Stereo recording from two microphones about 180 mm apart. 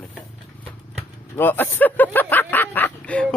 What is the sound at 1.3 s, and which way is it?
Speech, 10° left (ahead or behind).